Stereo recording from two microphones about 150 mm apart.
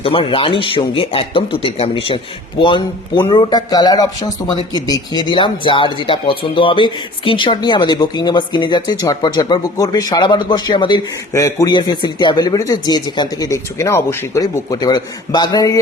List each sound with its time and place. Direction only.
0.0 s speech: 35° left (ahead or behind)
11.3 s speech: 20° left (ahead or behind)